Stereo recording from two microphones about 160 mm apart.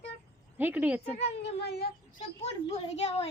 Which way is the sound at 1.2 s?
90° left.